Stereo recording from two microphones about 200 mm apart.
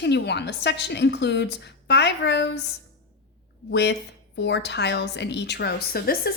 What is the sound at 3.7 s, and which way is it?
A woman's voice, 55° left (ahead or behind).